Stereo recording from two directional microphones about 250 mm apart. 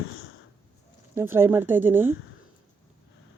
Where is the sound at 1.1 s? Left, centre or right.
Centre.